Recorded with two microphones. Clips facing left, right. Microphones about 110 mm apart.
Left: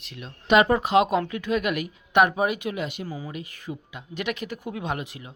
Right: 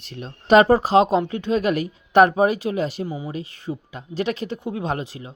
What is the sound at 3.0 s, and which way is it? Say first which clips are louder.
A woman's voice: right 5 dB; 25° right (ahead or behind).